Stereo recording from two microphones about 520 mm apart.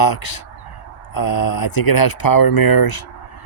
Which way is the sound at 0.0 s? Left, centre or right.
Left.